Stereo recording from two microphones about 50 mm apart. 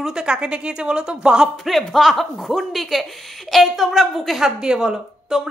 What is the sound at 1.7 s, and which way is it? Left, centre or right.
A woman's voice, centre.